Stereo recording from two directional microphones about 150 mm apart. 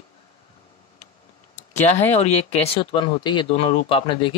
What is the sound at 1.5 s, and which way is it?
Speech, 50° left (ahead or behind).